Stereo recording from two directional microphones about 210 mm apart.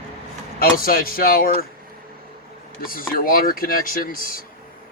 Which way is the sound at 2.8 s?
45° left (ahead or behind).